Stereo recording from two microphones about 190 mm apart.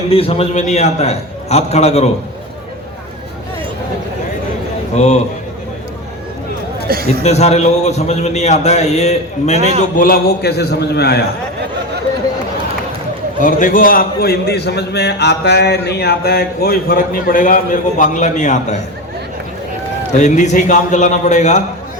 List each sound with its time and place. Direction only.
0.1 s a man's voice: 30° left (ahead or behind)
4.9 s a man's voice: 35° left (ahead or behind)
7.2 s a man's voice: 35° left (ahead or behind)
10.0 s a man's voice: 55° left (ahead or behind)
13.4 s a man's voice: 45° left (ahead or behind)
20.1 s a man's voice: 40° left (ahead or behind)